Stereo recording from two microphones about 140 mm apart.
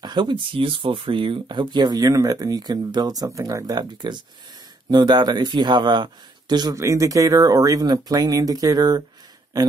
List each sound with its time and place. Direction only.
0.0 s speech: 35° right (ahead or behind)